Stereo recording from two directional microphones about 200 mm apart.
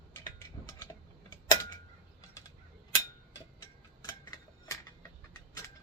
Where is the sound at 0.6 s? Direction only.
20° left (ahead or behind).